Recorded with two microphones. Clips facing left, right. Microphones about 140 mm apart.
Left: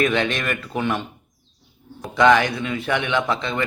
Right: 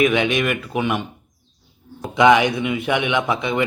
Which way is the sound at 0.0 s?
10° right (ahead or behind).